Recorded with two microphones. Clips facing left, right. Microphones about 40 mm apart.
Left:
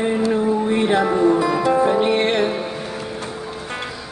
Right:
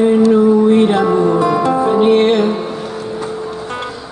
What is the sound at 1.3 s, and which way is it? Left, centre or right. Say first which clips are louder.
Music: right 4 dB; right.